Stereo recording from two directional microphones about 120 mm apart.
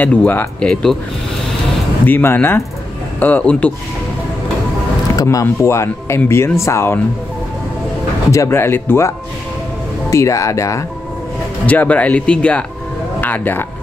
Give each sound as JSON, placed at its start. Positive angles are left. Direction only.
{"t": 0.0, "sound": "speech", "side_deg": 10}
{"t": 2.0, "sound": "speech", "side_deg": 15}
{"t": 5.1, "sound": "speech", "side_deg": 30}
{"t": 8.3, "sound": "speech", "side_deg": 25}
{"t": 11.6, "sound": "speech", "side_deg": 10}